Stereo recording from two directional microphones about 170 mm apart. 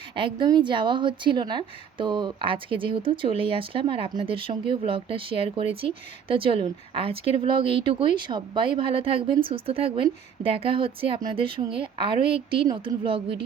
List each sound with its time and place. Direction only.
0.2 s a woman's voice: 30° right (ahead or behind)